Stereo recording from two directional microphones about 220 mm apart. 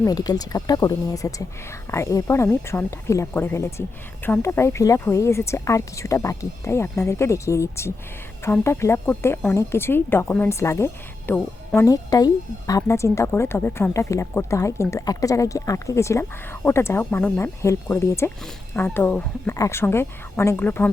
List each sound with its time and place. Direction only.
0.0 s speech: 15° left (ahead or behind)